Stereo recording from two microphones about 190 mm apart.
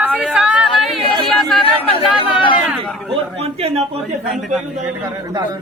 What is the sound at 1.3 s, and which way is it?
Speech, centre (ahead or behind).